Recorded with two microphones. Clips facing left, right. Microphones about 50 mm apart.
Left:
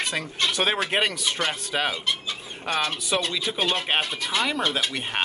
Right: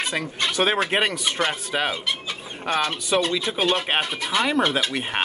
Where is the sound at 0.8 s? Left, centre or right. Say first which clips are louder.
Right 2 dB; centre.